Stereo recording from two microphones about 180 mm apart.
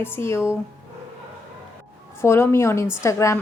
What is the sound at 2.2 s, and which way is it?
A woman's voice, 15° left (ahead or behind).